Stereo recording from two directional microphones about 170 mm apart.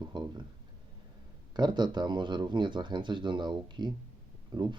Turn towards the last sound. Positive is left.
turn(degrees=-25)  # may be behind; listen again after turning